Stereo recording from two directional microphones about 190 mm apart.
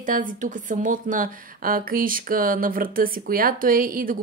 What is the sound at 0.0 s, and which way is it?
A woman's voice, 45° right (ahead or behind).